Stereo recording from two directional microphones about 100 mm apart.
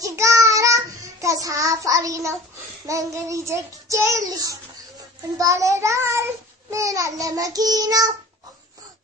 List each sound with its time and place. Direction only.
0.1 s child singing: 30° right (ahead or behind)